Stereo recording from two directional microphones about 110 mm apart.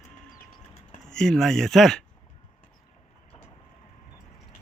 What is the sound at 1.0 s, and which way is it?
Speech, 5° left (ahead or behind).